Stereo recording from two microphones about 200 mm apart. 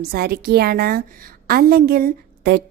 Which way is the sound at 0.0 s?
50° right (ahead or behind).